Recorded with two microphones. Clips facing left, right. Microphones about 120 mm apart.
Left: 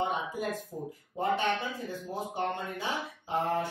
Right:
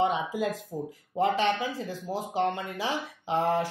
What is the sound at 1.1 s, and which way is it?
Speech, 90° right.